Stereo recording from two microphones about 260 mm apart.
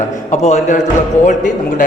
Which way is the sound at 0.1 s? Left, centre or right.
Left.